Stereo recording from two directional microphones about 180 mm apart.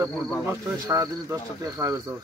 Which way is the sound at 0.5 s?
20° right (ahead or behind).